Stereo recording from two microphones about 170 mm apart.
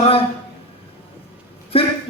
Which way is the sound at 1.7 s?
35° left (ahead or behind).